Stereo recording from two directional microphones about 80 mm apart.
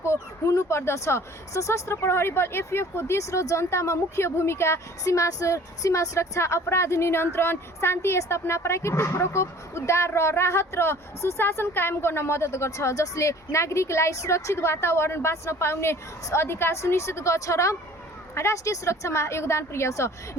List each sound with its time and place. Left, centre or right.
0.0 s speech: left